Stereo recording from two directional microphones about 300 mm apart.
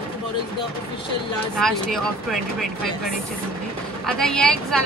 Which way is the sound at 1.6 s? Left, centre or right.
Centre.